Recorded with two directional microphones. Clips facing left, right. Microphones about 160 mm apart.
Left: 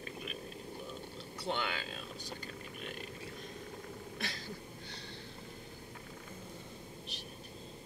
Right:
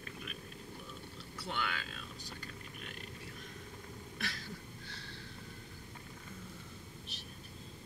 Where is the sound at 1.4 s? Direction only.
25° left (ahead or behind).